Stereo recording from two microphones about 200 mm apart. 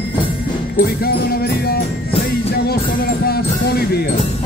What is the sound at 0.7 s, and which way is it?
Music, 50° left (ahead or behind).